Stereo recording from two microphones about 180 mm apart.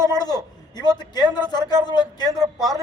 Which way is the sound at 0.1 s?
20° left (ahead or behind).